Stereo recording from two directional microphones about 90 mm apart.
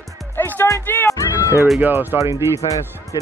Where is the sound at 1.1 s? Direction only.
35° left (ahead or behind).